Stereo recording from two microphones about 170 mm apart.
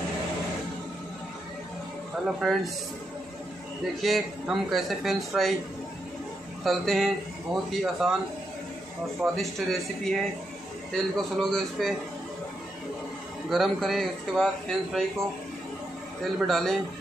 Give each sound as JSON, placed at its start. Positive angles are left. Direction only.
{"t": 2.2, "sound": "speech", "side_deg": 0}
{"t": 3.8, "sound": "speech", "side_deg": 0}
{"t": 6.6, "sound": "speech", "side_deg": 0}
{"t": 9.2, "sound": "speech", "side_deg": 0}
{"t": 13.5, "sound": "speech", "side_deg": 0}
{"t": 16.3, "sound": "speech", "side_deg": 0}